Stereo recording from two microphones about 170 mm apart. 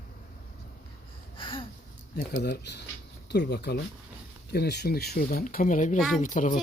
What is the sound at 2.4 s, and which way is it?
A child's voice, 80° left.